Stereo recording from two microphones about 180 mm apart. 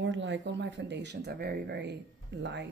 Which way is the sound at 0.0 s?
85° right.